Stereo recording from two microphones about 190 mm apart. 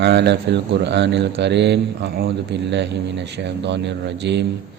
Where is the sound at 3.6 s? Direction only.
65° right (ahead or behind).